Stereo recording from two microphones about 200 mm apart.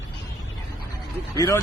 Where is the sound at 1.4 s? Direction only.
15° left (ahead or behind).